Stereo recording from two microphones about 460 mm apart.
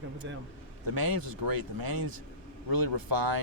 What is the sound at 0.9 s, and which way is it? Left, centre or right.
Speech, right.